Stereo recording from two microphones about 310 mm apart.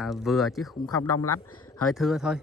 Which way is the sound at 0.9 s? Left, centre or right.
Left.